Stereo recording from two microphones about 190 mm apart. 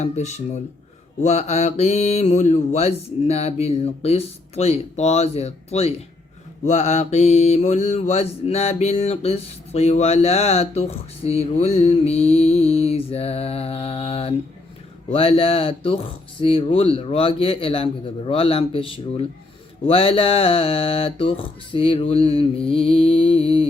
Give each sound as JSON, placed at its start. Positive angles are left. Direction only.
{"t": 0.0, "sound": "mantra", "side_deg": 35}
{"t": 15.1, "sound": "speech", "side_deg": 30}